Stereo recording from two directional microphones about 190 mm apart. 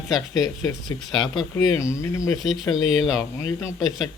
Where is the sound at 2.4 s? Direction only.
Centre (ahead or behind).